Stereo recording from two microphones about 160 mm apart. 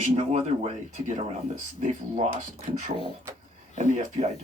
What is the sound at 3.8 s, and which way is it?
Speech, 50° right (ahead or behind).